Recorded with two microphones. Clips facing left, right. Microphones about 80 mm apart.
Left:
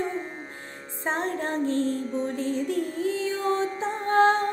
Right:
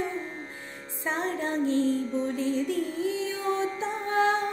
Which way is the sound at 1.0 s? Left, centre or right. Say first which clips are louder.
Left 1 dB; left.